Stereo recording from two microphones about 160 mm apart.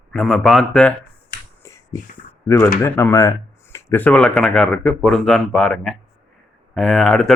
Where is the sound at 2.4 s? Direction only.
20° left (ahead or behind); by 7.3 s 5° left (ahead or behind).